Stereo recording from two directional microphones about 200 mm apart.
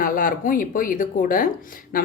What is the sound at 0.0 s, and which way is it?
Speech, 45° left (ahead or behind).